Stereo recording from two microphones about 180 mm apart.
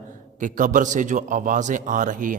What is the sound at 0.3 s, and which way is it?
A man's voice, 45° right (ahead or behind).